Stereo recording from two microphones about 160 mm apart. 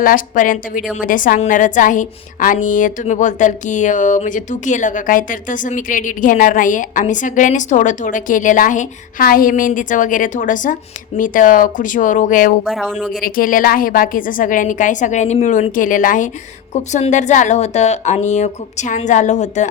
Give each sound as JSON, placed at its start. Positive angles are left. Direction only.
{"t": 0.0, "sound": "a woman's voice", "side_deg": 60}
{"t": 12.6, "sound": "speech", "side_deg": -5}
{"t": 13.1, "sound": "a woman's voice", "side_deg": 60}